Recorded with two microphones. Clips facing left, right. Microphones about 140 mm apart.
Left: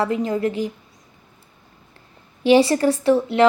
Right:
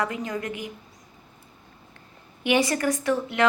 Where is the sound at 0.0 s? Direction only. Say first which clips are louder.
Left 8 dB; 30° left (ahead or behind).